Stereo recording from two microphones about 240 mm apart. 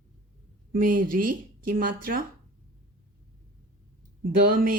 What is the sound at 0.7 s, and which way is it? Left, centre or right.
Speech, right.